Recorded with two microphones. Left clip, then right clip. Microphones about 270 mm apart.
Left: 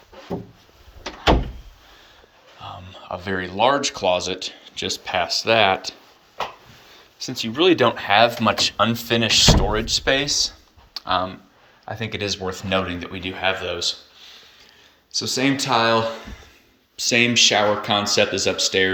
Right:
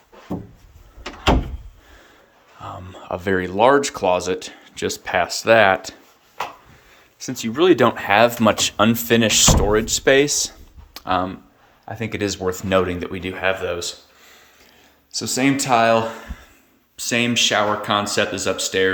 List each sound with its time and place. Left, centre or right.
2.6 s speech: right
7.3 s speech: centre
15.1 s speech: centre